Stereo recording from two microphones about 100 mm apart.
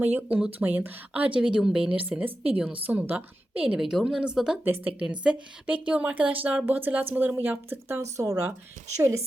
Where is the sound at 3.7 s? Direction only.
5° right (ahead or behind).